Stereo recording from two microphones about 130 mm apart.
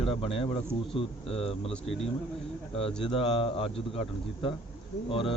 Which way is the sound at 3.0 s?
40° left (ahead or behind).